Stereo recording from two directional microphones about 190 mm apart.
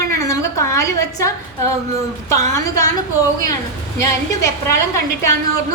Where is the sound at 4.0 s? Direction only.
15° left (ahead or behind).